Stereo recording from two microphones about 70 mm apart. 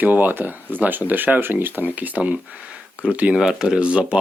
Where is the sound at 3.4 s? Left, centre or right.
Centre.